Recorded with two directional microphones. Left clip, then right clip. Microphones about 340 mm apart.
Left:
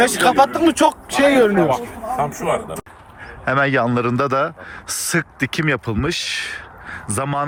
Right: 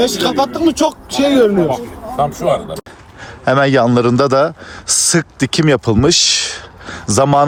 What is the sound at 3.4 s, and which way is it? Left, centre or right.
Speech, centre.